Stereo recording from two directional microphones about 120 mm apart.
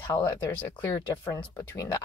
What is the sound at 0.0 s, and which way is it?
Speech, 20° left (ahead or behind).